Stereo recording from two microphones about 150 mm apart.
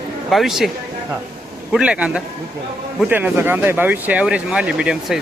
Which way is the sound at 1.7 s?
5° right (ahead or behind).